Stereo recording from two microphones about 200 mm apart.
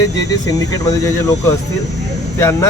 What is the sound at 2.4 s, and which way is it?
Speech, 15° left (ahead or behind).